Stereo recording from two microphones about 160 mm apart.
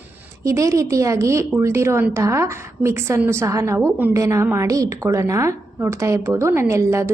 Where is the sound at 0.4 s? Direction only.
20° right (ahead or behind).